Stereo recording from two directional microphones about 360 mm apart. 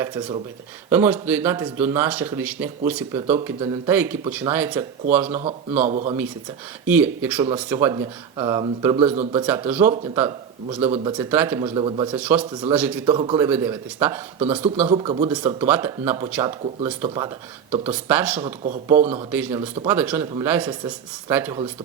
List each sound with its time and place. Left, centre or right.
0.9 s speech: centre
5.9 s speech: centre
6.8 s speech: centre
9.4 s a man's voice: centre
13.1 s speech: centre
15.4 s speech: centre
18.4 s speech: centre
19.3 s speech: centre